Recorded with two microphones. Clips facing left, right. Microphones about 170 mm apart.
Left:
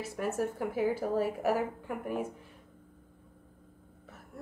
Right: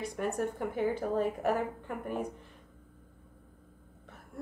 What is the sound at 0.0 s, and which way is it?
A woman's voice, 5° left (ahead or behind).